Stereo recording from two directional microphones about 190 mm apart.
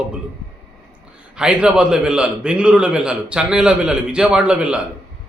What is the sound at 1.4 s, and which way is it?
A man's voice, 5° right (ahead or behind).